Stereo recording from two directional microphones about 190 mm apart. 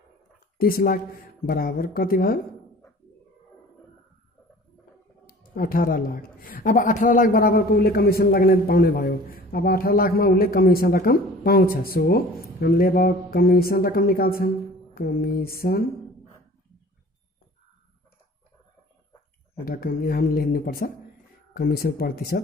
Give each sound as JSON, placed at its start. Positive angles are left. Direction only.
{"t": 0.6, "sound": "a woman's voice", "side_deg": 50}
{"t": 5.2, "sound": "a woman's voice", "side_deg": 50}
{"t": 19.6, "sound": "a woman's voice", "side_deg": 50}